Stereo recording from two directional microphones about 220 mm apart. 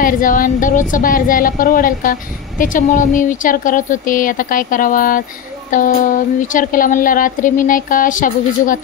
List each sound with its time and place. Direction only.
0.0 s speech: 40° left (ahead or behind)